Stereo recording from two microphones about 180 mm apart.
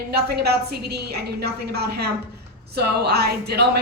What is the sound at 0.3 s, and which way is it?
A woman's voice, 60° right (ahead or behind).